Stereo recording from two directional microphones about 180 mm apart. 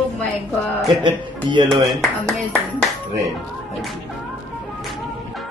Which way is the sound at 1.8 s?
Centre (ahead or behind).